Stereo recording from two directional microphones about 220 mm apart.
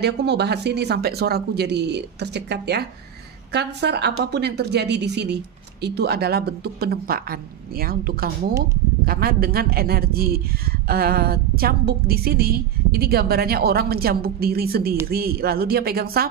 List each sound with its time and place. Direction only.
0.0 s speech: 50° right (ahead or behind)